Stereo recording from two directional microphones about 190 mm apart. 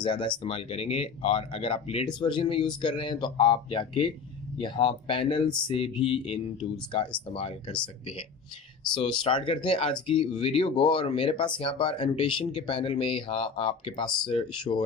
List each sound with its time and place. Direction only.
0.0 s speech: 25° left (ahead or behind)
9.2 s speech: 25° left (ahead or behind)